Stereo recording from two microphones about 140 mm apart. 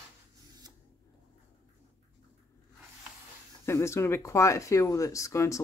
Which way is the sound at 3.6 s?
20° left (ahead or behind).